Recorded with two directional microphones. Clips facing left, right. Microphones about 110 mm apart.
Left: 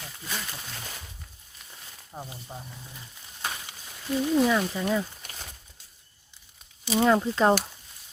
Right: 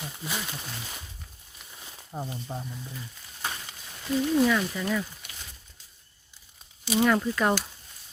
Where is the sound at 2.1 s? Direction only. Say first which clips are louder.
Right 5 dB; 5° right (ahead or behind).